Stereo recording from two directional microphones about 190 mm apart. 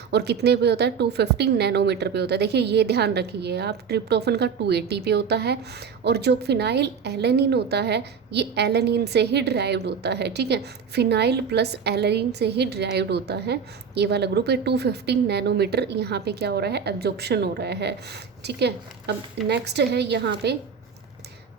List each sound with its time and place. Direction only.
0.1 s a woman's voice: 60° right (ahead or behind)